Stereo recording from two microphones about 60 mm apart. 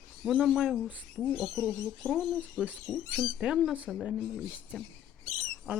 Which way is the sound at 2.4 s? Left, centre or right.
Right.